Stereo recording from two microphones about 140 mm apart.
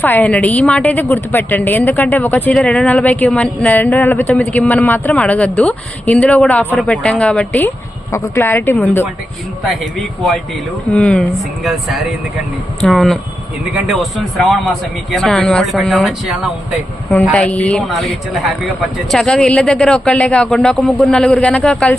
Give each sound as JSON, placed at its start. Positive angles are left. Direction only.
{"t": 0.0, "sound": "speech", "side_deg": 10}
{"t": 10.9, "sound": "speech", "side_deg": 5}